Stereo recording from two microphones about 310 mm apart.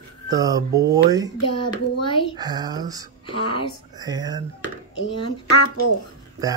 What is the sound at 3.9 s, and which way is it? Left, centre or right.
Speech, centre.